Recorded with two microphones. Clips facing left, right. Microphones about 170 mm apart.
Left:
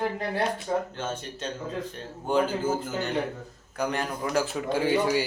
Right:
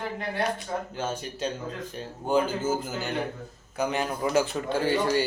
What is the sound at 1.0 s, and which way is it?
Speech, 10° right (ahead or behind).